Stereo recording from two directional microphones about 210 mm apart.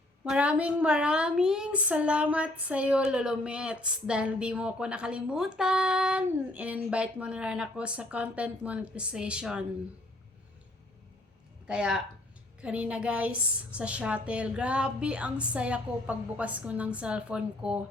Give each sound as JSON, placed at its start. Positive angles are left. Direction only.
{"t": 0.3, "sound": "a woman's voice", "side_deg": -5}
{"t": 11.6, "sound": "a woman's voice", "side_deg": -5}